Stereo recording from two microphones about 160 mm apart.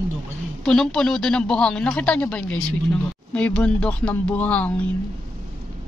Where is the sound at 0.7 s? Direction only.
5° left (ahead or behind).